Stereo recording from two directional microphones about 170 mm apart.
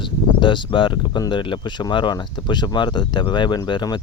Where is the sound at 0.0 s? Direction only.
30° left (ahead or behind).